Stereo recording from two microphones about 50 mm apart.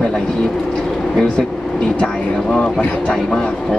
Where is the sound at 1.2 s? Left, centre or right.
Centre.